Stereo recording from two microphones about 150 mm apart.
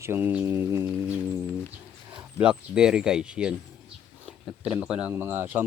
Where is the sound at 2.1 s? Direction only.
5° right (ahead or behind).